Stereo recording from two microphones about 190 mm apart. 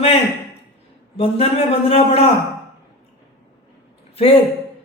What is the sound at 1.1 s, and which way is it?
Speech, 30° left (ahead or behind).